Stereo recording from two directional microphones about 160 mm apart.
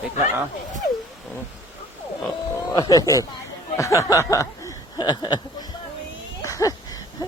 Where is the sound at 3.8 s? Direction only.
20° left (ahead or behind).